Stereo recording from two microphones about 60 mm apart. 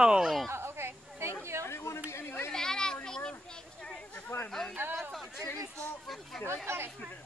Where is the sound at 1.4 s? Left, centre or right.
Right.